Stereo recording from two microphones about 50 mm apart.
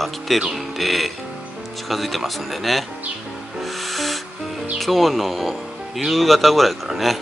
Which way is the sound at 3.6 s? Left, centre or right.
Centre.